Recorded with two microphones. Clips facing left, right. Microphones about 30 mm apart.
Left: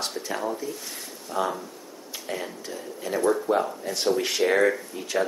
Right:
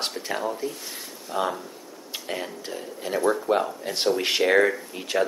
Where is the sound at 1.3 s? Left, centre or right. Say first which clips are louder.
Even; right.